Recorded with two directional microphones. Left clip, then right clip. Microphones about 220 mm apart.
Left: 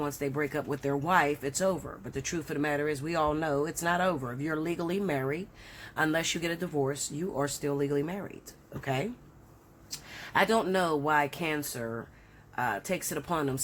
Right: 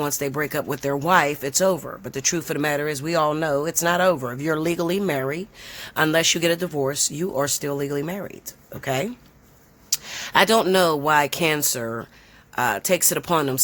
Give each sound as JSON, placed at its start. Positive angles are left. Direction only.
{"t": 0.0, "sound": "speech", "side_deg": -45}